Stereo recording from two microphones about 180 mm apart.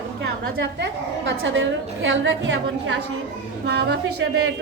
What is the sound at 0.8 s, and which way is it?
A woman's voice, 80° right.